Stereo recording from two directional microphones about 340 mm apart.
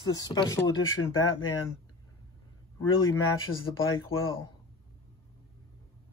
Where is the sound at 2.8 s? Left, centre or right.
Left.